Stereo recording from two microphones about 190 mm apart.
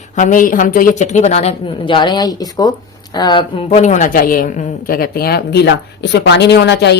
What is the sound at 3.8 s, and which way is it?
A woman's voice, 40° left (ahead or behind).